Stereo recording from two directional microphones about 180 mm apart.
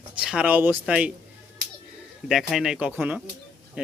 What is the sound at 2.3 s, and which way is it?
A man's voice, centre (ahead or behind).